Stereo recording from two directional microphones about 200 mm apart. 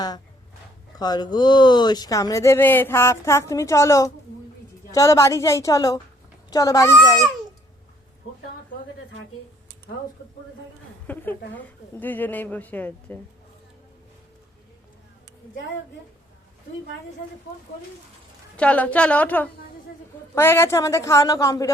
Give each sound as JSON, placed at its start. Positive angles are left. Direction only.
{"t": 0.9, "sound": "speech", "side_deg": 20}
{"t": 11.0, "sound": "speech", "side_deg": 10}
{"t": 18.5, "sound": "speech", "side_deg": 5}